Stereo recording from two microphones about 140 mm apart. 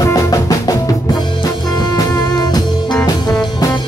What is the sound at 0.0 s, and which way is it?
Music, 25° left (ahead or behind).